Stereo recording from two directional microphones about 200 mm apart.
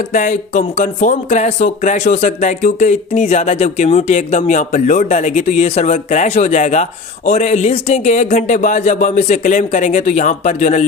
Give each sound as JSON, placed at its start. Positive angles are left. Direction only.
{"t": 0.1, "sound": "speech", "side_deg": 40}